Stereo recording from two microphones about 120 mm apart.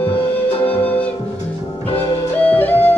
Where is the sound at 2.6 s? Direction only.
15° left (ahead or behind).